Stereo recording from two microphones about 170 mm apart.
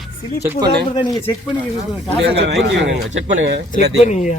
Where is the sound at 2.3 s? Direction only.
85° right.